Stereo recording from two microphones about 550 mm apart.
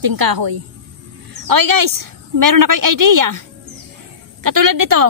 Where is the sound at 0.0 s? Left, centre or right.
Right.